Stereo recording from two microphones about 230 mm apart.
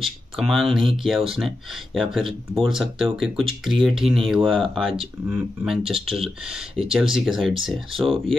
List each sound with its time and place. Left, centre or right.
0.0 s speech: centre